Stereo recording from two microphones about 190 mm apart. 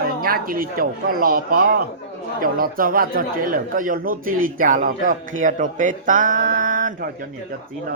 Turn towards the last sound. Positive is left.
turn(degrees=-45)  # may be behind; listen again after turning